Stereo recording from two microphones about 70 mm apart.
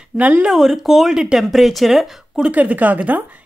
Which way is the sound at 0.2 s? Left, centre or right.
Right.